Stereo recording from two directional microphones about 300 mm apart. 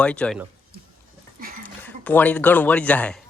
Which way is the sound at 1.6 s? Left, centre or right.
Centre.